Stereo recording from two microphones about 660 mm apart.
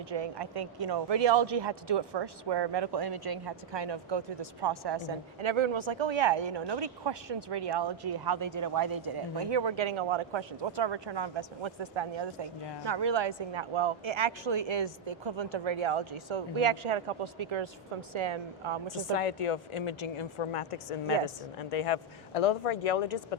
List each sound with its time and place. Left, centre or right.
0.1 s a woman's voice: right
19.1 s speech: left